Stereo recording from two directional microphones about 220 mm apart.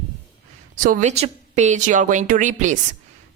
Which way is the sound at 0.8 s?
35° right (ahead or behind).